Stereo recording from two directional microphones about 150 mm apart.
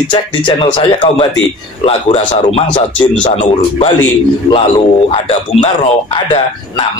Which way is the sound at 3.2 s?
45° left (ahead or behind).